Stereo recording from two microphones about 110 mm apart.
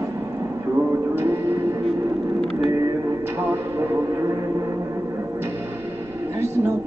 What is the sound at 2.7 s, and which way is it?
Music, 30° right (ahead or behind).